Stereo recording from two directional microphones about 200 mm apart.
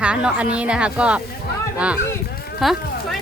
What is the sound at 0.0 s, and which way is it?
A woman's voice, 5° right (ahead or behind).